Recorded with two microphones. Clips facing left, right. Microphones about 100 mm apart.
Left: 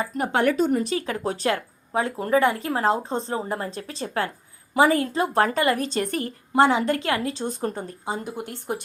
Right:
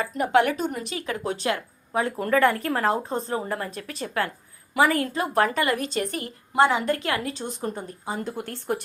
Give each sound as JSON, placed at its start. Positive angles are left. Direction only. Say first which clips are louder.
{"t": 0.0, "sound": "a woman's voice", "louder": "right 1 dB", "side_deg": 30}
{"t": 8.2, "sound": "speech", "louder": "right 1 dB", "side_deg": 15}